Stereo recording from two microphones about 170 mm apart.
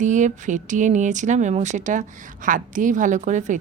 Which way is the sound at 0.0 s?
45° right (ahead or behind).